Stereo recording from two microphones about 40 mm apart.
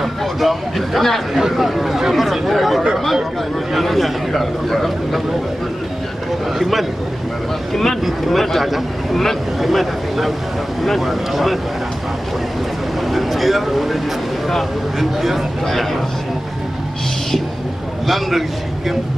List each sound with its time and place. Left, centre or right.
0.0 s speech: centre
6.6 s speech: centre
7.7 s speech: centre
13.1 s speech: centre
18.0 s speech: centre